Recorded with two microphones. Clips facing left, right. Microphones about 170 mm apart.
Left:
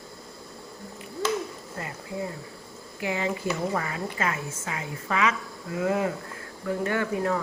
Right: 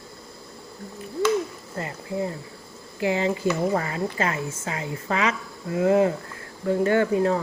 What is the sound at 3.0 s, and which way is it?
Speech, 30° right (ahead or behind).